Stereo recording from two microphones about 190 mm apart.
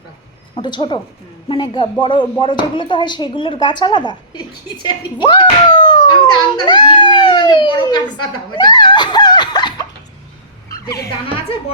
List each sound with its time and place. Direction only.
0.5 s a man's voice: 25° left (ahead or behind)